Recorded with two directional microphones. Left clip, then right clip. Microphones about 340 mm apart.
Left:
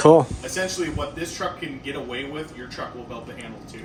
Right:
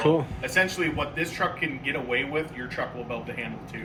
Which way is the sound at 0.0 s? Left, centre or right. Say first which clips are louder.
Left 9 dB; centre.